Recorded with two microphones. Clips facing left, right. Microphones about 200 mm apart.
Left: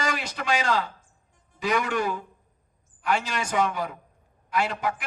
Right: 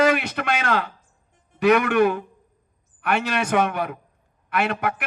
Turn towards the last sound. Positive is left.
turn(degrees=-65)  # may be behind; listen again after turning